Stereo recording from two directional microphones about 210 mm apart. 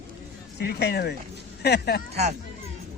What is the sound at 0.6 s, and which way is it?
A child's voice, 50° left (ahead or behind).